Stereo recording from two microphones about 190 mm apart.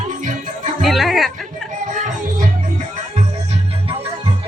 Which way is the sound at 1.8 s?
45° right (ahead or behind).